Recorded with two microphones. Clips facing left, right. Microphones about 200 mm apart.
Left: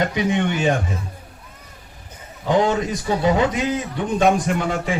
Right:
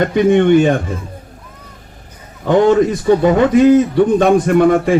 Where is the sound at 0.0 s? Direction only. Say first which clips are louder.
Right 9 dB; 50° right (ahead or behind).